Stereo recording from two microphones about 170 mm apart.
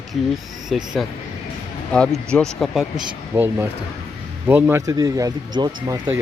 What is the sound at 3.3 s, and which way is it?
Speech, 10° right (ahead or behind).